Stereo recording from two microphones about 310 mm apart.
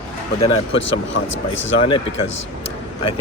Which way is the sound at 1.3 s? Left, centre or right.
Left.